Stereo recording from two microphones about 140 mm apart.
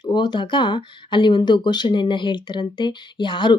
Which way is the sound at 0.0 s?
30° left (ahead or behind).